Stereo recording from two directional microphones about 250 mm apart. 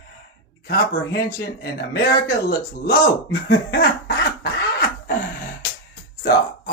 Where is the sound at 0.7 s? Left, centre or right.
Left.